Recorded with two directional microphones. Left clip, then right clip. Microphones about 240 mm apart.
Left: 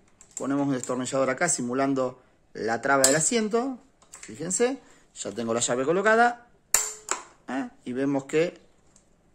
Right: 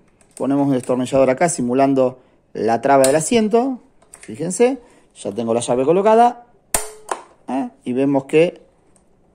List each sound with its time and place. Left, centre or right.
0.4 s speech: centre
7.4 s speech: centre